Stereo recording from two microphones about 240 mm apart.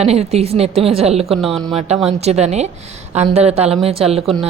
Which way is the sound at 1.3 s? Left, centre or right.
Centre.